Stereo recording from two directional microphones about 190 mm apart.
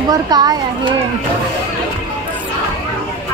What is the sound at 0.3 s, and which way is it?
Speech, 20° right (ahead or behind).